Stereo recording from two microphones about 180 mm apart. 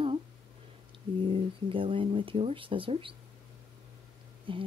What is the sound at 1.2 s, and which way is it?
Speech, 30° right (ahead or behind).